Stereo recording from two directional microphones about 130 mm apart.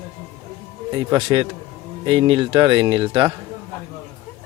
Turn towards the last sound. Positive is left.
turn(degrees=-40)  # may be behind; listen again after turning